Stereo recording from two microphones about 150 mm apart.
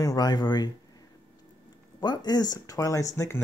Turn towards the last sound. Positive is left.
turn(degrees=20)  # may be behind; listen again after turning